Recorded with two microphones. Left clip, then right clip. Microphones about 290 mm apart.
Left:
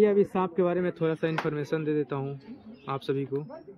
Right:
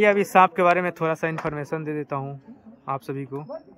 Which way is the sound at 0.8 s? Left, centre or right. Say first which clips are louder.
Right 4 dB; centre.